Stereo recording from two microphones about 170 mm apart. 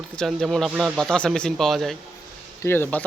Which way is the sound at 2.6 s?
15° left (ahead or behind).